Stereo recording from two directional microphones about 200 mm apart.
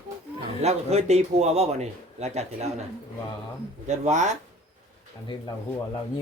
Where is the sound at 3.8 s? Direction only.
35° right (ahead or behind).